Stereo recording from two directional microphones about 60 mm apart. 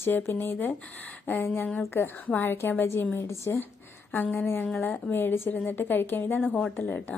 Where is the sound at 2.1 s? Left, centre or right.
Left.